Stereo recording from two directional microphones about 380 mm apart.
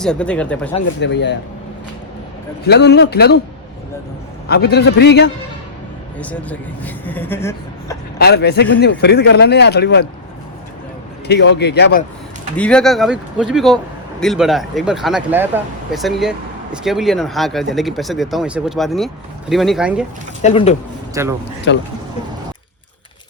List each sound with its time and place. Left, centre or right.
0.0 s speech: centre
0.9 s speech: left
2.6 s speech: left
4.4 s speech: left
6.1 s speech: centre
8.2 s speech: left
11.3 s speech: left
12.5 s speech: centre
20.4 s speech: centre
21.1 s a man's voice: centre
21.7 s speech: left